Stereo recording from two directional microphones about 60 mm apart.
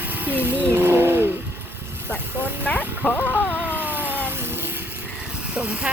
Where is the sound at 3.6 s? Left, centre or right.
Right.